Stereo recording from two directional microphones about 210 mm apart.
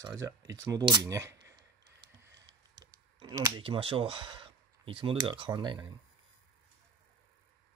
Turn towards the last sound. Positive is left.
turn(degrees=-20)  # may be behind; listen again after turning